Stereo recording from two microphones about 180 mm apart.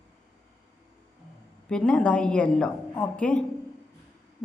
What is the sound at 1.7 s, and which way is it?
A woman's voice, 5° left (ahead or behind).